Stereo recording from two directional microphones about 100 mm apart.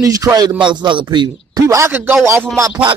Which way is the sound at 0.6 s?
55° right (ahead or behind).